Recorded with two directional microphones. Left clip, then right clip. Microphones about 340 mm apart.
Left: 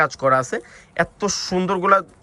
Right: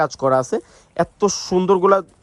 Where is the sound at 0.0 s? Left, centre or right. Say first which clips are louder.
Even; centre.